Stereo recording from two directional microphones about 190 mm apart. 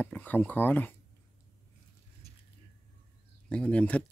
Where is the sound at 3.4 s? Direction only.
5° left (ahead or behind).